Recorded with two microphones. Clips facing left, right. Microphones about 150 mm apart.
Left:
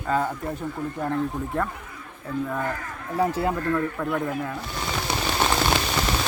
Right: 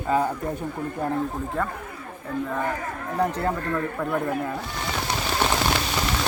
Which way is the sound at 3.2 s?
5° left (ahead or behind).